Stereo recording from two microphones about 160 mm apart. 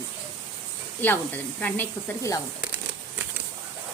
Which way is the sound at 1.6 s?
15° left (ahead or behind).